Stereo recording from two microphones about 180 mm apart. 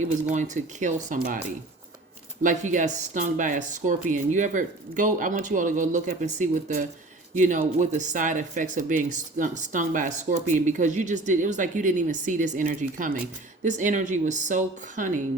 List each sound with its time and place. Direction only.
0.3 s speech: 45° right (ahead or behind)
2.4 s speech: 45° right (ahead or behind)